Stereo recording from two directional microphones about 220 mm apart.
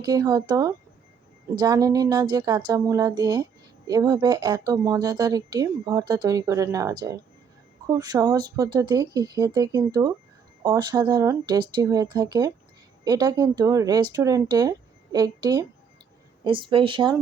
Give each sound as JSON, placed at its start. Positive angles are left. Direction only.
{"t": 0.0, "sound": "speech", "side_deg": -20}